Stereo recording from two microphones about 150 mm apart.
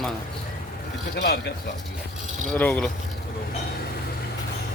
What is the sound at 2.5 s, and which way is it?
Speech, 10° left (ahead or behind).